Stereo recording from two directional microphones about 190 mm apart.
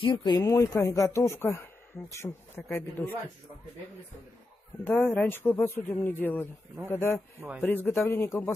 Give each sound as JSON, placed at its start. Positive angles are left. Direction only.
{"t": 0.0, "sound": "speech", "side_deg": 20}
{"t": 4.8, "sound": "speech", "side_deg": 10}